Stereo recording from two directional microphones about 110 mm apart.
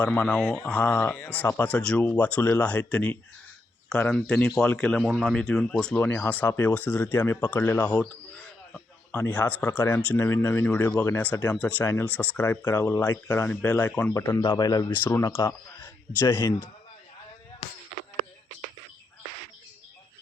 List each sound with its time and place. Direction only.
0.1 s speech: 15° left (ahead or behind)
5.0 s speech: 5° right (ahead or behind)
5.3 s speech: 5° left (ahead or behind)
9.2 s speech: 15° left (ahead or behind)
14.1 s speech: 25° left (ahead or behind)
14.4 s speech: 40° left (ahead or behind)
15.0 s speech: 25° left (ahead or behind)